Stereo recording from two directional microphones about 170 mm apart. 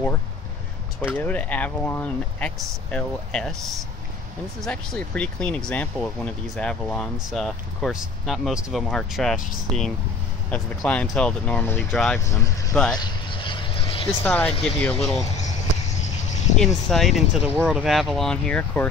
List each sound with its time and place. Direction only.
1.1 s speech: 10° left (ahead or behind)
4.6 s speech: 5° left (ahead or behind)
12.2 s speech: 20° left (ahead or behind)
12.9 s vehicle: 25° left (ahead or behind)
14.0 s speech: 10° left (ahead or behind)
16.5 s speech: centre (ahead or behind)